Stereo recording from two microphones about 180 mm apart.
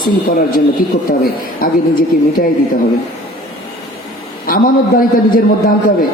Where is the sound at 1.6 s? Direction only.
55° left (ahead or behind).